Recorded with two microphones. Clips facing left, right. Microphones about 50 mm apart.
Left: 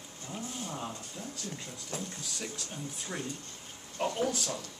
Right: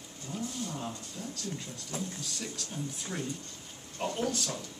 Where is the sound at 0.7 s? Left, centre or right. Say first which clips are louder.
Even; centre.